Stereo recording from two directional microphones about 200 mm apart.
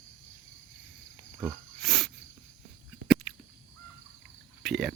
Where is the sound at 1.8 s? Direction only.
Centre (ahead or behind).